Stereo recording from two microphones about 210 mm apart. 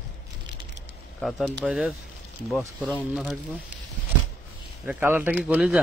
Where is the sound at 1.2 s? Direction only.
Centre (ahead or behind).